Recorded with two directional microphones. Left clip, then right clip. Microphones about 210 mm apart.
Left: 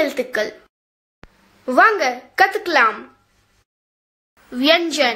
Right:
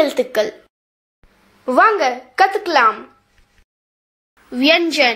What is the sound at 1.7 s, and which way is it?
A woman's voice, centre (ahead or behind).